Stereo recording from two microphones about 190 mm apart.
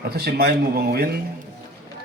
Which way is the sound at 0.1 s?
55° right (ahead or behind).